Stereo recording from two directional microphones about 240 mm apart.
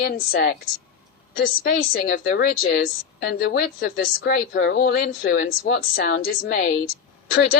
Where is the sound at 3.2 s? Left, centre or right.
Left.